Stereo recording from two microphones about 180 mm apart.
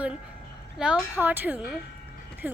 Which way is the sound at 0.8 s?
5° right (ahead or behind).